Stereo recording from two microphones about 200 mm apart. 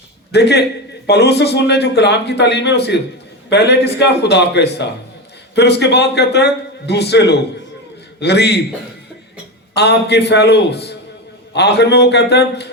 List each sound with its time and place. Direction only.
0.3 s a man's voice: 55° left (ahead or behind)
9.7 s a man's voice: 55° left (ahead or behind)